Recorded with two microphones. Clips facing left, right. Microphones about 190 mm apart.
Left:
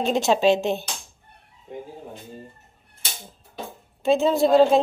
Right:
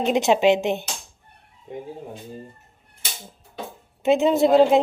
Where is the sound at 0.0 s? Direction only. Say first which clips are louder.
Right 1 dB; 20° right (ahead or behind).